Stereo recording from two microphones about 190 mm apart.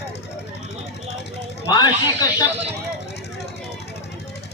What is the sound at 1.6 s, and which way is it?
Speech, 20° left (ahead or behind).